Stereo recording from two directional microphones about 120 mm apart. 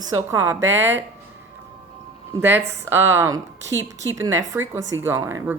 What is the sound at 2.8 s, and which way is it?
Speech, 20° right (ahead or behind).